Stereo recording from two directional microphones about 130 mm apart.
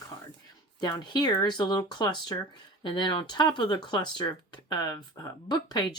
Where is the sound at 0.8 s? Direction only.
35° left (ahead or behind).